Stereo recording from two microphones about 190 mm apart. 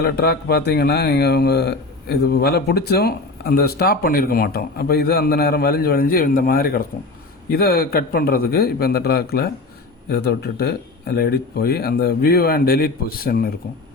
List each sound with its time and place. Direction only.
0.0 s a man's voice: 55° left (ahead or behind)